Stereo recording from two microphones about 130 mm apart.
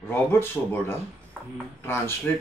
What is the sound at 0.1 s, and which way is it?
Speech, 20° left (ahead or behind).